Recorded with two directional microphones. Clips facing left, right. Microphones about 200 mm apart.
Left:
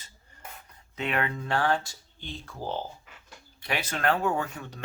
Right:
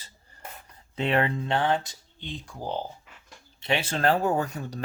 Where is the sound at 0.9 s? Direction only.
30° right (ahead or behind).